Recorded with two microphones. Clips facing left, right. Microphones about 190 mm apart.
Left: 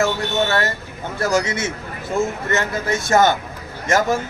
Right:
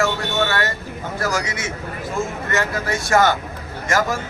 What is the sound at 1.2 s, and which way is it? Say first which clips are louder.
Speech: left 5 dB; 25° left (ahead or behind).